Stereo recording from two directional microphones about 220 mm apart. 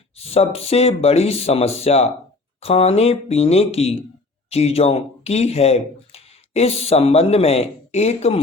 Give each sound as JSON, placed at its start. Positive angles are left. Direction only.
{"t": 0.2, "sound": "speech", "side_deg": 25}